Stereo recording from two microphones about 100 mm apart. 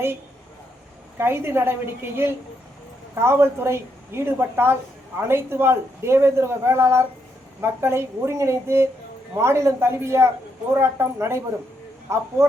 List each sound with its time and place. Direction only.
1.2 s speech: 25° right (ahead or behind)